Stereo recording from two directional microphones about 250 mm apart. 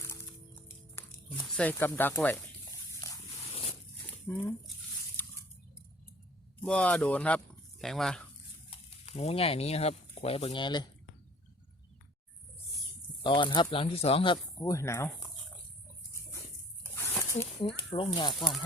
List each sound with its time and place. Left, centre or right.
0.9 s speech: centre
3.5 s zipper: left
4.3 s speech: centre
5.2 s squish: centre
6.6 s speech: centre
9.0 s speech: left
13.2 s speech: centre
16.9 s a sound: centre
17.9 s speech: left
18.3 s speech: centre